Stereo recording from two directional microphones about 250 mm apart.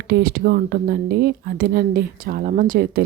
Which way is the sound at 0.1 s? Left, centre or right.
Right.